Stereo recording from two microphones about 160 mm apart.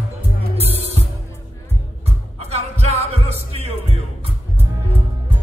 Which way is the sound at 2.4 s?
40° right (ahead or behind).